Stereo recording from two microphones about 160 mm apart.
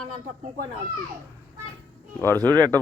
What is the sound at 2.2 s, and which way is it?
Speech, 10° left (ahead or behind).